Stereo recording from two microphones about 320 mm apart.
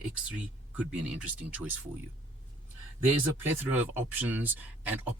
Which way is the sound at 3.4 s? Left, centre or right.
Centre.